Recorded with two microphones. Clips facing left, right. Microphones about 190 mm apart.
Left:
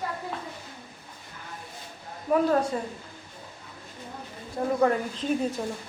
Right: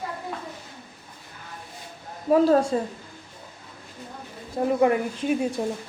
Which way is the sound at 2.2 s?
30° right (ahead or behind).